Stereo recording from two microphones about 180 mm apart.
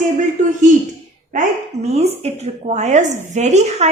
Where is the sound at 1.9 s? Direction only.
35° right (ahead or behind).